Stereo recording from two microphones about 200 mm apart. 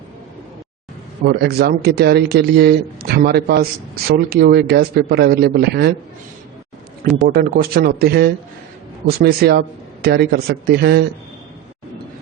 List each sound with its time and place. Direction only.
1.2 s a man's voice: 50° right (ahead or behind)
7.3 s a man's voice: 50° right (ahead or behind)